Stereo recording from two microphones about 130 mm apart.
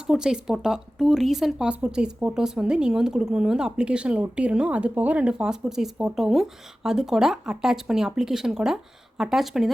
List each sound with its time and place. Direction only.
0.1 s speech: 5° right (ahead or behind)